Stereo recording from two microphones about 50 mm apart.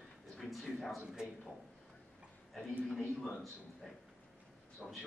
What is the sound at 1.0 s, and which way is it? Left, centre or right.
Speech, centre.